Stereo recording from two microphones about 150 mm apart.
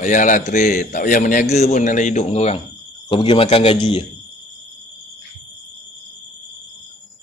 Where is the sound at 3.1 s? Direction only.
35° left (ahead or behind).